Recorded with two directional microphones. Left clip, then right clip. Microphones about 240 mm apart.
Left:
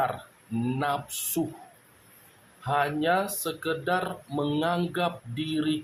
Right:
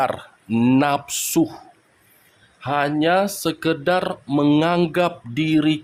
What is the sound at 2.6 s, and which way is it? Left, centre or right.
Speech, right.